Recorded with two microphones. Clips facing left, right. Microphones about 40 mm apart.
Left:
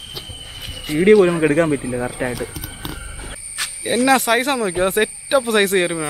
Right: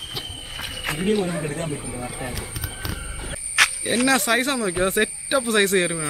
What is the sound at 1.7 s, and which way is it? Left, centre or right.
Speech, left.